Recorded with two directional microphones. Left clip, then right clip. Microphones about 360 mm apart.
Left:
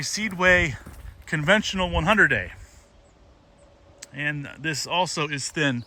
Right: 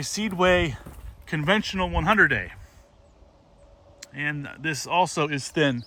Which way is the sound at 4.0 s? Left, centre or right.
Centre.